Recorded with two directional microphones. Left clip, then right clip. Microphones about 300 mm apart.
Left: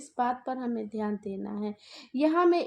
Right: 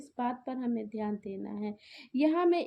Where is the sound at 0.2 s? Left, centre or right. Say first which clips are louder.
Left 5 dB; left.